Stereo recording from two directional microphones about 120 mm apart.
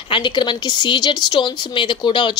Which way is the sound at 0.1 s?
40° left (ahead or behind).